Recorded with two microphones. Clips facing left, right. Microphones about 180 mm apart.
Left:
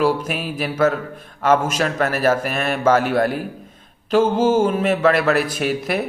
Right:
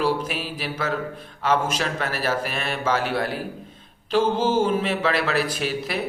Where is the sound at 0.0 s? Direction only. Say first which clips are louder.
Left 4 dB; 50° left (ahead or behind).